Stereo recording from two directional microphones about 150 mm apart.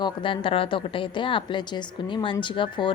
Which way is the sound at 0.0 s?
35° left (ahead or behind).